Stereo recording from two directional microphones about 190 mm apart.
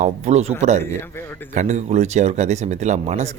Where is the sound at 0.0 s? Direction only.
35° right (ahead or behind).